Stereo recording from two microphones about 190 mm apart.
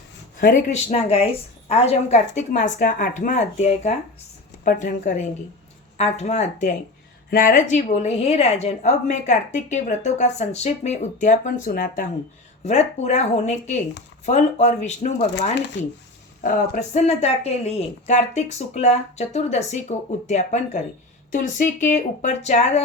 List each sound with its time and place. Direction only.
0.7 s a woman's voice: 35° left (ahead or behind)
4.6 s a woman's voice: 45° left (ahead or behind)